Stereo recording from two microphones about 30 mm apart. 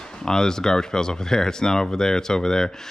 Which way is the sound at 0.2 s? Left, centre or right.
Left.